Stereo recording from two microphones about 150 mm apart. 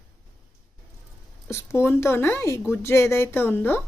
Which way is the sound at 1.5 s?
15° left (ahead or behind).